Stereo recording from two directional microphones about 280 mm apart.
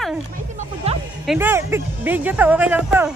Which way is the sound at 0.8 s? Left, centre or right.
Right.